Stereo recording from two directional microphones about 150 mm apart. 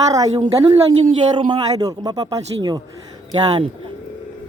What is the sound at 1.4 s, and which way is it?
Speech, 30° right (ahead or behind).